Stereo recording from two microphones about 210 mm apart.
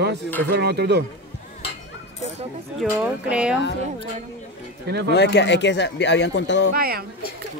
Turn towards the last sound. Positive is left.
turn(degrees=-45)  # may be behind; listen again after turning